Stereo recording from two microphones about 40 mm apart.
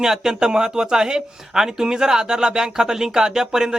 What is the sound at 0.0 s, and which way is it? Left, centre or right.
Speech, centre.